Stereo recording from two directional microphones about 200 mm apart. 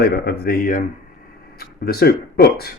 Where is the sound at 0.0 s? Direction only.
50° left (ahead or behind).